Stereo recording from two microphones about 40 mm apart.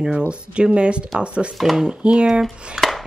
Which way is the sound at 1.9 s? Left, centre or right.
Right.